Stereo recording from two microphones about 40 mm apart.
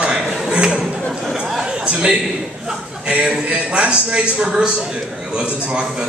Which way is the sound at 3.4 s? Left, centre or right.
Right.